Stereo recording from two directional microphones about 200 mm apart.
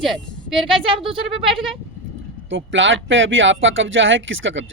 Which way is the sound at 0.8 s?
25° right (ahead or behind).